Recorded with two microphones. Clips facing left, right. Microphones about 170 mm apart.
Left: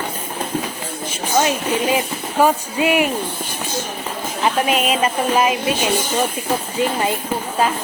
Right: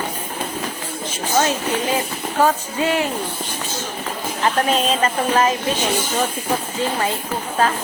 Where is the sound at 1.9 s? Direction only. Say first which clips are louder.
Left 2 dB; 15° left (ahead or behind).